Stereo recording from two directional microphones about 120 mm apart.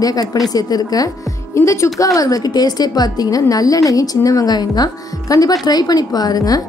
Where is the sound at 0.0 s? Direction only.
30° left (ahead or behind).